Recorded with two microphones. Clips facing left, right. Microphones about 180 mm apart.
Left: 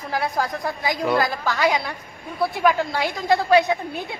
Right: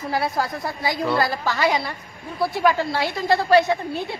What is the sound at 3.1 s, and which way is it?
Speech, centre (ahead or behind).